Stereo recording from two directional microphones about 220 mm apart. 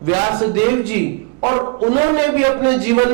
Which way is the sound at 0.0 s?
10° right (ahead or behind).